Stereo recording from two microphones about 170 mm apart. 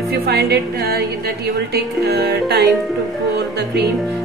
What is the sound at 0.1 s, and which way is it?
A woman's voice, 70° right (ahead or behind).